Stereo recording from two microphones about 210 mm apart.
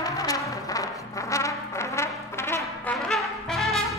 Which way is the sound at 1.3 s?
15° left (ahead or behind).